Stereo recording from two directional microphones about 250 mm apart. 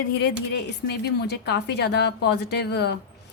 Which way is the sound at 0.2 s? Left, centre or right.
Left.